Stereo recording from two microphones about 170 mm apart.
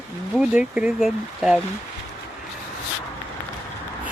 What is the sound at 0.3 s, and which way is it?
Speech, 5° right (ahead or behind).